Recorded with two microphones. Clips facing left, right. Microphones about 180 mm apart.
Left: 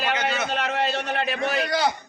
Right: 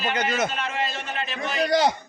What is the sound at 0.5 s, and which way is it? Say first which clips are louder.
Speech: left 4 dB; 70° left (ahead or behind).